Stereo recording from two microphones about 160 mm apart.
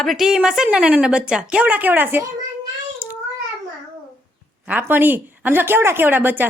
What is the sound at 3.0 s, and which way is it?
Cat, 10° right (ahead or behind).